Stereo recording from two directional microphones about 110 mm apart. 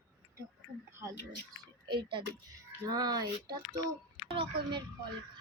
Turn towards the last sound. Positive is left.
turn(degrees=-50)  # may be behind; listen again after turning